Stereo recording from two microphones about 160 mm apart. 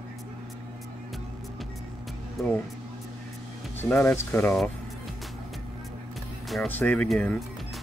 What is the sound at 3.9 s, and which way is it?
Speech, 10° left (ahead or behind).